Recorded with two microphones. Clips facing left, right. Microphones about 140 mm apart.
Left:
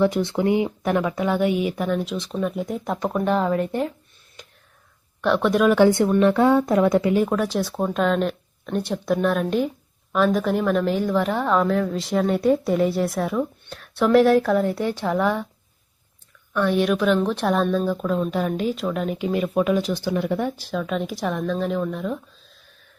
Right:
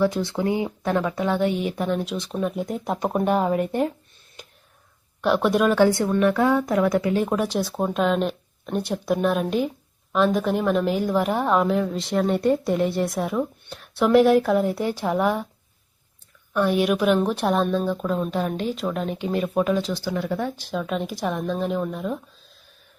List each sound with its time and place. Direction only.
0.0 s speech: 20° left (ahead or behind); by 3.0 s centre (ahead or behind)
3.0 s speech: 30° right (ahead or behind)
3.2 s a woman's voice: 20° right (ahead or behind)
5.2 s speech: 5° right (ahead or behind)
5.7 s speech: 20° left (ahead or behind)
7.3 s a woman's voice: centre (ahead or behind)
16.5 s a woman's voice: 15° right (ahead or behind); by 19.8 s centre (ahead or behind)
19.9 s speech: 15° left (ahead or behind)
20.6 s speech: centre (ahead or behind)